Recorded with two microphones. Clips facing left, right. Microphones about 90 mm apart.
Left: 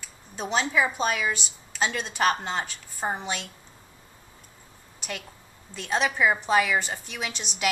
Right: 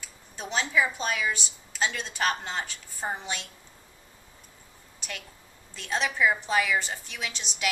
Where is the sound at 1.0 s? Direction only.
5° left (ahead or behind).